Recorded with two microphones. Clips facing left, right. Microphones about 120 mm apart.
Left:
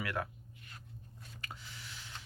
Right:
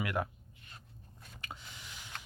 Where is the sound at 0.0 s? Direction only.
20° right (ahead or behind).